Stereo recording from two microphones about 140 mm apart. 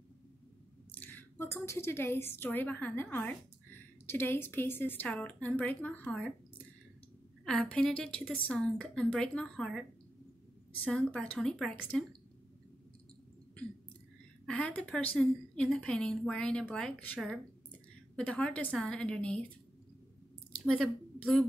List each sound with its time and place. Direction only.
0.9 s a woman's voice: 10° left (ahead or behind)
10.9 s a woman's voice: 5° left (ahead or behind)
14.4 s a woman's voice: 10° left (ahead or behind)
20.6 s a woman's voice: 5° left (ahead or behind)